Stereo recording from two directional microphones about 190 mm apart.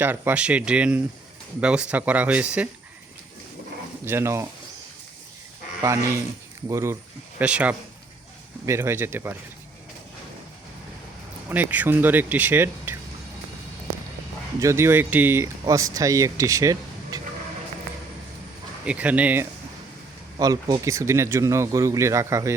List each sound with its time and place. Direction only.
0.0 s speech: 10° right (ahead or behind)
4.0 s speech: 15° right (ahead or behind)
5.8 s speech: 15° right (ahead or behind)
11.4 s speech: 10° right (ahead or behind)
14.6 s speech: 15° right (ahead or behind)
18.9 s speech: 5° right (ahead or behind)
20.4 s speech: 20° right (ahead or behind)